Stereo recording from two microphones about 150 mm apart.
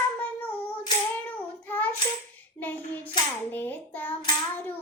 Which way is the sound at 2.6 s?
10° left (ahead or behind).